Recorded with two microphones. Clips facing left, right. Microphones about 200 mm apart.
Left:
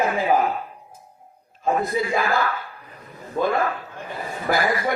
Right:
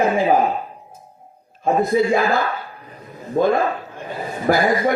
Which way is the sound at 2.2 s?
20° right (ahead or behind).